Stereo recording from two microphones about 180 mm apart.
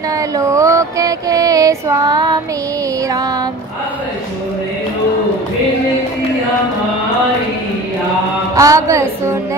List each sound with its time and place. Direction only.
0.4 s music: 15° right (ahead or behind)
8.5 s music: 20° right (ahead or behind)